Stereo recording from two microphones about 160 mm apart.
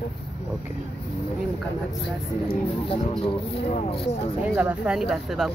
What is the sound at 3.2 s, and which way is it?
Speech, 40° left (ahead or behind).